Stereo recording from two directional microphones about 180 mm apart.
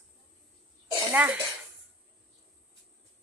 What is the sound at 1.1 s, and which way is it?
Speech, 10° right (ahead or behind).